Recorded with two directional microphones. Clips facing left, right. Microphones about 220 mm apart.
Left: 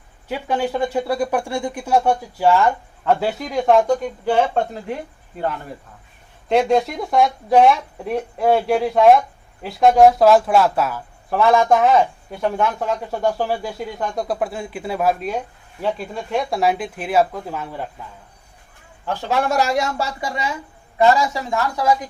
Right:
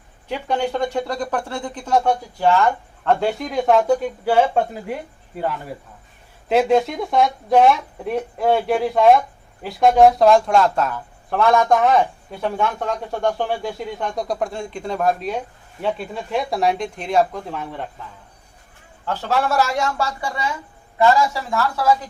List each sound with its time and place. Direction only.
0.3 s speech: 5° left (ahead or behind)
6.5 s speech: centre (ahead or behind)
19.0 s speech: 15° left (ahead or behind)